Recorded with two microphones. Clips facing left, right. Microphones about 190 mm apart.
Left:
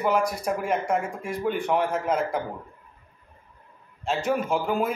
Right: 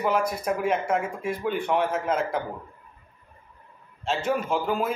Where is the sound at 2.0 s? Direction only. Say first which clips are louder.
Left 1 dB; 10° left (ahead or behind).